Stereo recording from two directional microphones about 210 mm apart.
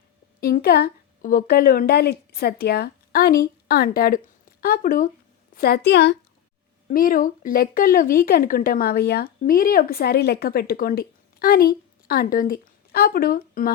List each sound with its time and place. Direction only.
0.3 s a woman's voice: 45° left (ahead or behind)
6.8 s speech: 40° left (ahead or behind)